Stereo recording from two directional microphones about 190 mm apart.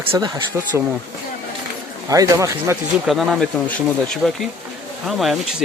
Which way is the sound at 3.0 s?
Centre (ahead or behind).